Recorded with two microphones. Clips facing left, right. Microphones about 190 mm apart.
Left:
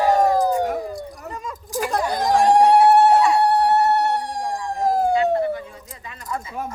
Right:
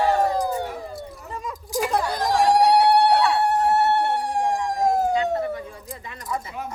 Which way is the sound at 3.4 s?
35° left (ahead or behind).